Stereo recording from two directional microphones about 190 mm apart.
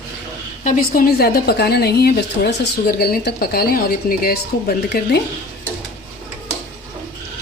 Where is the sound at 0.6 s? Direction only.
50° left (ahead or behind).